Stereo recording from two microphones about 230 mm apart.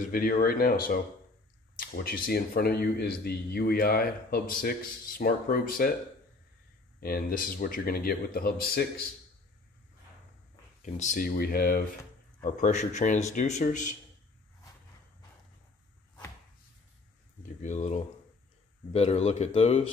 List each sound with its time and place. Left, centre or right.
0.0 s speech: left
7.0 s speech: left
10.8 s speech: left
17.6 s speech: left